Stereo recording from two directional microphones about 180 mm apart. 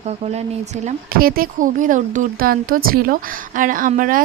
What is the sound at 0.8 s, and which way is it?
Speech, 55° right (ahead or behind).